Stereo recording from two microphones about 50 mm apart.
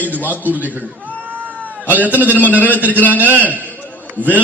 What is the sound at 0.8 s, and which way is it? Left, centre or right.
Cat, right.